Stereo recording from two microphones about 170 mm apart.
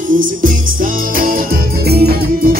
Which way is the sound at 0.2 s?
55° right (ahead or behind).